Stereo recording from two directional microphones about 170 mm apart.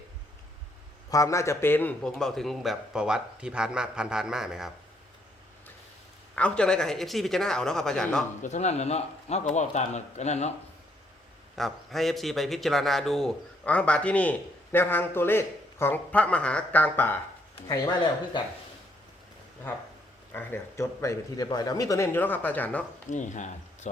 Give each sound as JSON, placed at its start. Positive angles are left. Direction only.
{"t": 1.1, "sound": "a man's voice", "side_deg": 20}
{"t": 6.3, "sound": "a man's voice", "side_deg": 5}
{"t": 8.4, "sound": "speech", "side_deg": 45}
{"t": 11.5, "sound": "a man's voice", "side_deg": 0}
{"t": 17.7, "sound": "speech", "side_deg": 25}
{"t": 20.3, "sound": "a man's voice", "side_deg": 15}
{"t": 23.0, "sound": "speech", "side_deg": 45}